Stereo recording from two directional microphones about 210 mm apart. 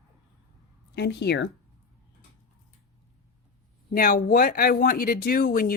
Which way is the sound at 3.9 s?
45° left (ahead or behind).